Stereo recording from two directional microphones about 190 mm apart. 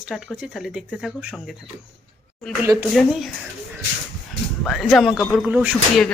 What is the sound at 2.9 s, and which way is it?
Speech, centre (ahead or behind).